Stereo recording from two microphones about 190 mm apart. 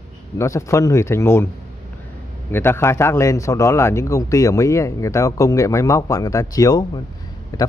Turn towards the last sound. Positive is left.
turn(degrees=20)  # may be behind; listen again after turning